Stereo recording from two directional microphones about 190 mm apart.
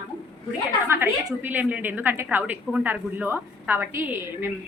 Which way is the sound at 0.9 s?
10° right (ahead or behind).